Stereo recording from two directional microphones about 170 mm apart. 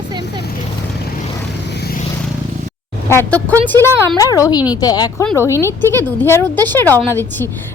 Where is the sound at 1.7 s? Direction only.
70° left (ahead or behind).